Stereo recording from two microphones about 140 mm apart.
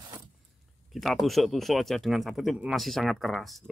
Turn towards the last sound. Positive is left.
turn(degrees=0)  # may be behind; listen again after turning